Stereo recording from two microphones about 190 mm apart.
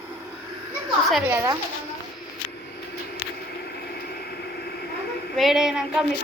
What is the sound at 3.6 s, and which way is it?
Vehicle, 55° left (ahead or behind).